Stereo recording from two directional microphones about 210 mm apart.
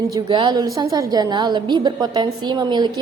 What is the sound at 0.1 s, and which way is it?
A woman's voice, 20° right (ahead or behind).